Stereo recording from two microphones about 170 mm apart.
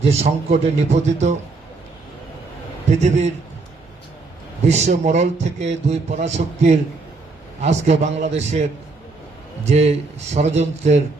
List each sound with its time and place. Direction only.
0.0 s a man's voice: 40° right (ahead or behind)
3.0 s a man's voice: 40° right (ahead or behind)
4.6 s a man's voice: 40° right (ahead or behind)
9.6 s a man's voice: 40° right (ahead or behind)